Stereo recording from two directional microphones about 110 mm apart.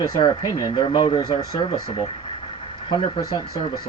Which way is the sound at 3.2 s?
40° left (ahead or behind).